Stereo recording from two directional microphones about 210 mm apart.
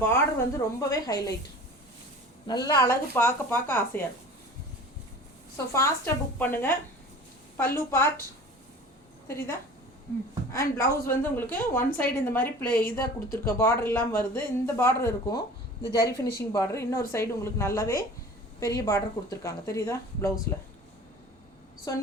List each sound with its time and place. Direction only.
0.1 s a woman's voice: 15° left (ahead or behind)
2.5 s a woman's voice: 15° left (ahead or behind)
5.7 s a woman's voice: 10° left (ahead or behind)
9.2 s a woman's voice: 10° left (ahead or behind)
21.9 s a woman's voice: 15° left (ahead or behind)